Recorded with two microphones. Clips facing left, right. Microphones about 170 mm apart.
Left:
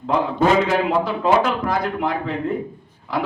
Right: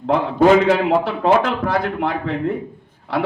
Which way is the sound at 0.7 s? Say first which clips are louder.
Right 3 dB; 70° right (ahead or behind).